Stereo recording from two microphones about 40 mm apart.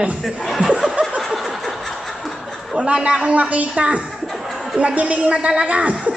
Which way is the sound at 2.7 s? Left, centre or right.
Right.